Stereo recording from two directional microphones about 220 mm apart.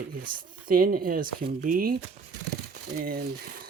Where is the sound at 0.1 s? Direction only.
40° right (ahead or behind).